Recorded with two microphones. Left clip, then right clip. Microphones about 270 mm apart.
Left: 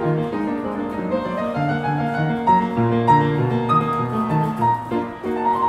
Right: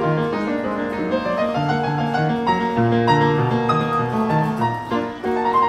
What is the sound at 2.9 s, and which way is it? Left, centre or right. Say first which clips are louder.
Music: left 2 dB; centre.